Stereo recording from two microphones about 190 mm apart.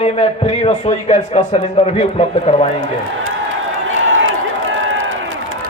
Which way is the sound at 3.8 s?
90° right.